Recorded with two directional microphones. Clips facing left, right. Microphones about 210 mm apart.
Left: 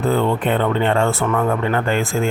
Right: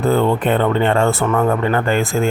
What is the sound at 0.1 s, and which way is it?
Speech, 40° right (ahead or behind).